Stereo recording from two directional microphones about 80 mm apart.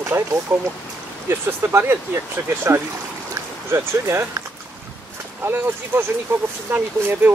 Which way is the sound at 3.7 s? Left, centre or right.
Right.